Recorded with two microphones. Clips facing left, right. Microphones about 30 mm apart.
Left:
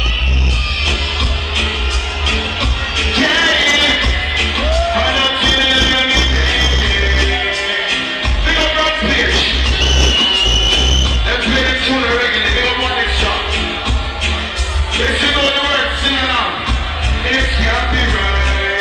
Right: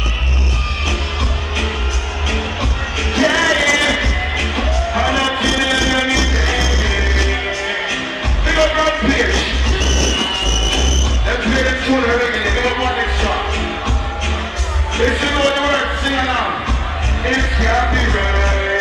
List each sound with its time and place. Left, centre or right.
3.0 s music: left
3.4 s music: left
4.0 s music: left
4.9 s music: left
7.2 s music: left
8.5 s heart sounds: left
10.1 s music: left
10.7 s music: left
15.0 s music: left
16.0 s a sound: left